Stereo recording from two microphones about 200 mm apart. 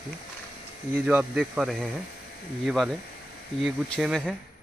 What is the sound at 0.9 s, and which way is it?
Speech, 5° right (ahead or behind).